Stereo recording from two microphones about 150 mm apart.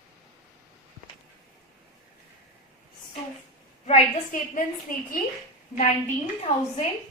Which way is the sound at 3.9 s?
60° left (ahead or behind).